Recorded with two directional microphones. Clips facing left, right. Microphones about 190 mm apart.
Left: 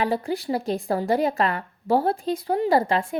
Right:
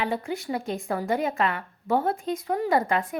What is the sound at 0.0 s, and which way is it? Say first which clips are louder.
A woman's voice: left 4 dB; 35° left (ahead or behind).